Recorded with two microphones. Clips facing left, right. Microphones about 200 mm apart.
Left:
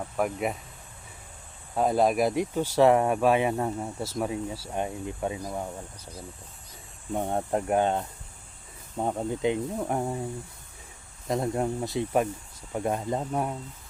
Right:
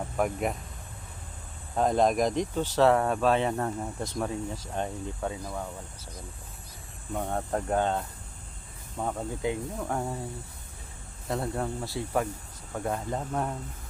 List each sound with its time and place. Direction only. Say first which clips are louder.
0.2 s speech: even; centre (ahead or behind)
1.7 s speech: left 1 dB; 5° left (ahead or behind)
7.1 s speech: left 3 dB; 20° left (ahead or behind)
11.3 s speech: left 4 dB; 20° left (ahead or behind)